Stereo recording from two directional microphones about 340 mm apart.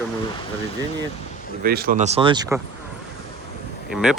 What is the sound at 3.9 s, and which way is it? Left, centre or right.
Speech, centre.